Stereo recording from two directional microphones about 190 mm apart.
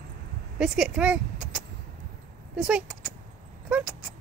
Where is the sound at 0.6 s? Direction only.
5° right (ahead or behind).